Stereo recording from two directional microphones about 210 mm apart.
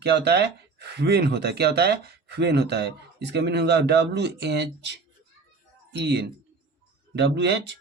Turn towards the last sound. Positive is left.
turn(degrees=-55)  # may be behind; listen again after turning